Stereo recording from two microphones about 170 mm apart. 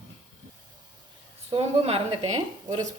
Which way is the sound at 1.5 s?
35° right (ahead or behind).